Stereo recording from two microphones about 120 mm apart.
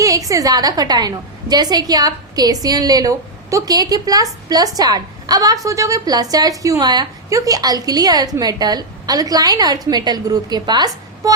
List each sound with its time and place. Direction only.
0.0 s a woman's voice: 30° right (ahead or behind)